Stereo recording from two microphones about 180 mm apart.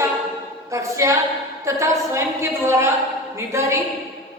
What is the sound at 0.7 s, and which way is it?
A woman's voice, 15° right (ahead or behind).